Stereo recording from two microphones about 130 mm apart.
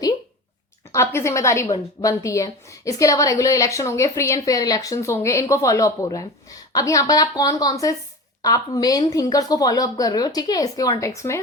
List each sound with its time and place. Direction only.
0.9 s a woman's voice: 20° left (ahead or behind)